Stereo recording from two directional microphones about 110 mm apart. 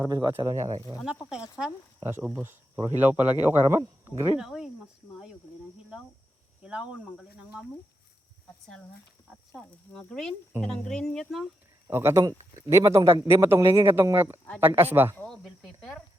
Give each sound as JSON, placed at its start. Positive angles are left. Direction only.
{"t": 0.0, "sound": "speech", "side_deg": -35}
{"t": 1.3, "sound": "speech", "side_deg": -5}
{"t": 2.0, "sound": "speech", "side_deg": -20}
{"t": 4.4, "sound": "a sound", "side_deg": -5}
{"t": 6.6, "sound": "speech", "side_deg": -10}
{"t": 9.6, "sound": "speech", "side_deg": 5}
{"t": 11.9, "sound": "speech", "side_deg": -20}